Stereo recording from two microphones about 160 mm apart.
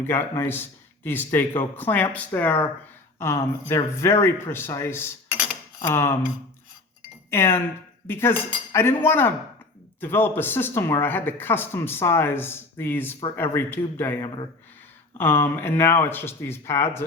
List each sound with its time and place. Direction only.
0.1 s speech: 15° left (ahead or behind)
7.3 s speech: 15° left (ahead or behind)